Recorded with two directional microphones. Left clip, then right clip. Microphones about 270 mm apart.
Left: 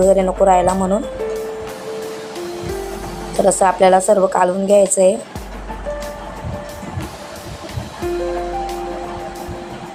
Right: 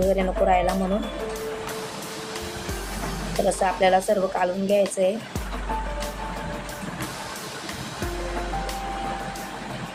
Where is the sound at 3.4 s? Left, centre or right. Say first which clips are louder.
Left 9 dB; centre.